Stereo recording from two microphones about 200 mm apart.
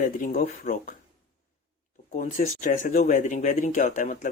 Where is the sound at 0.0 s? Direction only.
40° left (ahead or behind).